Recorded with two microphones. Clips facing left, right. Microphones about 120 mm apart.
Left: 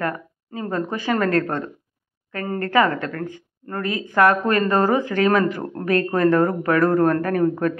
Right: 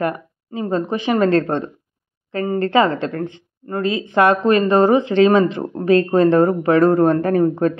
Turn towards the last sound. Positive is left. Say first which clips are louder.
# right 4 dB
turn(degrees=-25)  # may be behind; listen again after turning